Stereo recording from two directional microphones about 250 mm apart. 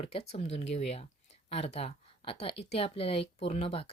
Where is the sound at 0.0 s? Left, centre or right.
Left.